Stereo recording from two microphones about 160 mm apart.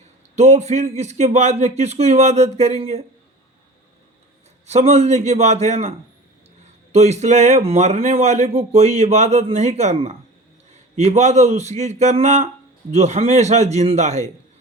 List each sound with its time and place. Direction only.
0.3 s speech: 45° right (ahead or behind)
4.6 s speech: 45° right (ahead or behind)
6.9 s speech: 45° right (ahead or behind)